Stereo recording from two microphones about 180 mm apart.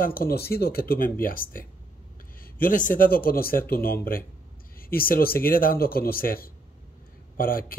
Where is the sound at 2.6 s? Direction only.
50° left (ahead or behind).